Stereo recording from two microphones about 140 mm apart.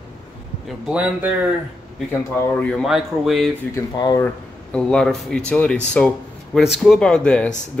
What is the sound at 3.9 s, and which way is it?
Speech, 30° left (ahead or behind).